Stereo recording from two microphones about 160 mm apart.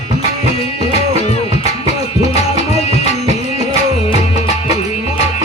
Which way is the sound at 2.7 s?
45° left (ahead or behind).